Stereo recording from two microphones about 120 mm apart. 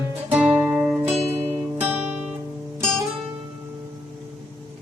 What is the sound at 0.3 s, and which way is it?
Music, 10° right (ahead or behind).